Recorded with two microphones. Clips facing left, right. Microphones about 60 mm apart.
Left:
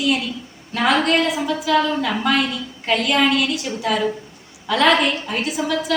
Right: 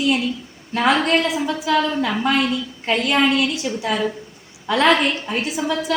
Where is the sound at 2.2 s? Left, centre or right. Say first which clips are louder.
Right 1 dB; right.